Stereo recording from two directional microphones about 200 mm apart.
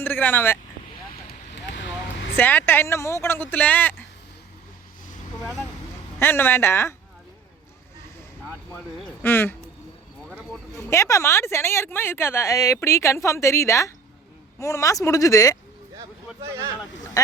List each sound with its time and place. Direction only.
0.0 s speech: 10° left (ahead or behind)
1.5 s vehicle: 60° left (ahead or behind)
2.3 s speech: 10° left (ahead or behind)
6.1 s speech: 10° left (ahead or behind)
8.7 s speech: 10° left (ahead or behind)
10.2 s a sound: 5° right (ahead or behind)
10.8 s speech: 15° left (ahead or behind)